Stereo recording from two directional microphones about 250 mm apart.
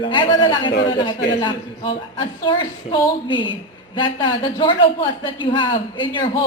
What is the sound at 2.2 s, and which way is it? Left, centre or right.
A man's voice, centre.